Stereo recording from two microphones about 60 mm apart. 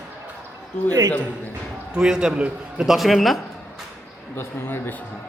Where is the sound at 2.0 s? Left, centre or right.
Centre.